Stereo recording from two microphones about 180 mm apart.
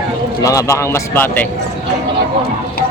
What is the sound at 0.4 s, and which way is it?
A man's voice, 15° left (ahead or behind).